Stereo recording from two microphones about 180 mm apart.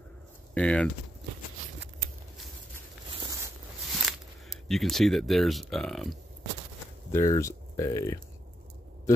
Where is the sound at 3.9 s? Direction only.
Centre (ahead or behind).